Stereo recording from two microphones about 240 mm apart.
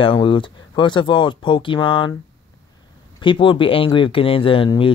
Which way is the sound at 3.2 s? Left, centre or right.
Centre.